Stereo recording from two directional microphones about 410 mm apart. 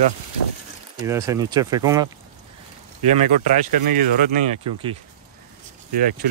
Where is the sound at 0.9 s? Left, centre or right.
Centre.